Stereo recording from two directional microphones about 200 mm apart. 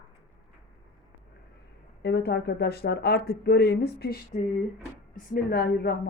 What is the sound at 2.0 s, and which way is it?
A woman's voice, 55° left (ahead or behind).